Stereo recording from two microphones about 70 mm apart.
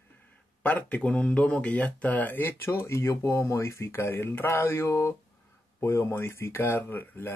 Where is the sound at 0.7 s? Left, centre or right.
Left.